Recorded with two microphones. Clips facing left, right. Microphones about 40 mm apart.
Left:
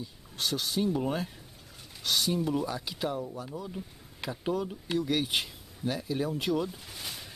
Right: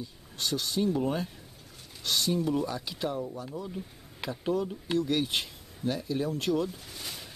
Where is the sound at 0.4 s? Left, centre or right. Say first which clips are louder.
Even; centre.